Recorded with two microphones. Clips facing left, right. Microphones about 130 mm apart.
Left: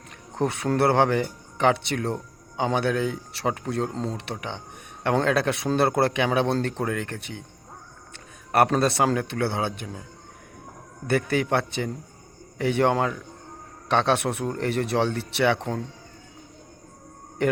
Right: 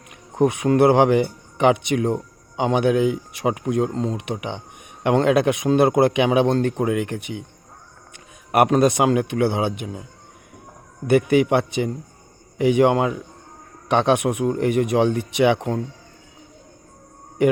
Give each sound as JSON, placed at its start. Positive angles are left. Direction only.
{"t": 0.3, "sound": "speech", "side_deg": -15}
{"t": 3.9, "sound": "speech", "side_deg": -5}
{"t": 8.1, "sound": "a sound", "side_deg": -15}
{"t": 8.8, "sound": "speech", "side_deg": -15}
{"t": 17.4, "sound": "speech", "side_deg": -10}